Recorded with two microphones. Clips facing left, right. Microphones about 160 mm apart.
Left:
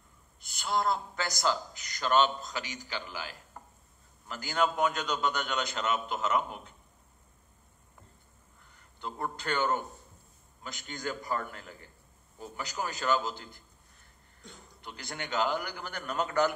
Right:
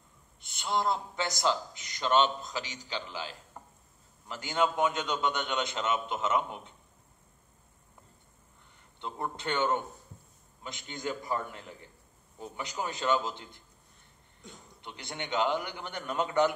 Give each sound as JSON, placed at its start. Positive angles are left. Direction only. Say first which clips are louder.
{"t": 0.4, "sound": "a man's voice", "louder": "even", "side_deg": -25}
{"t": 3.6, "sound": "dishes", "louder": "right 1 dB", "side_deg": -15}
{"t": 4.3, "sound": "a man's voice", "louder": "even", "side_deg": -25}
{"t": 9.0, "sound": "a man's voice", "louder": "even", "side_deg": -20}